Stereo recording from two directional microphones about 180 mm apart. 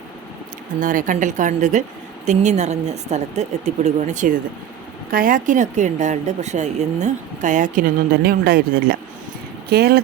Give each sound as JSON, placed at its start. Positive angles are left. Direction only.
{"t": 0.8, "sound": "a woman's voice", "side_deg": -45}